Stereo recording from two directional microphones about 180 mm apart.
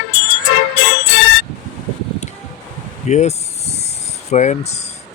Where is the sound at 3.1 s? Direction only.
40° left (ahead or behind).